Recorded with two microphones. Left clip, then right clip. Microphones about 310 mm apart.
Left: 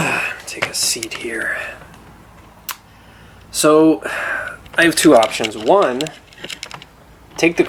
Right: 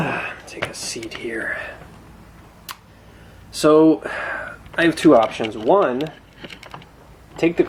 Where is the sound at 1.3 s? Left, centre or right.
Centre.